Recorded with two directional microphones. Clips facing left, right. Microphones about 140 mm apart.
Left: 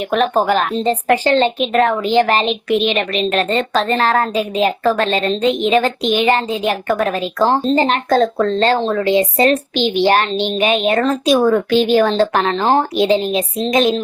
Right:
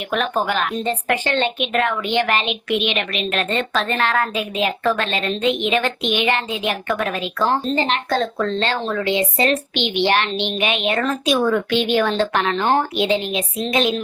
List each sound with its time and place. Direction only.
0.1 s speech: 40° left (ahead or behind)